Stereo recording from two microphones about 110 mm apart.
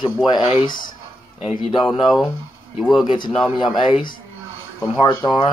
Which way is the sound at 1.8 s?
Centre (ahead or behind).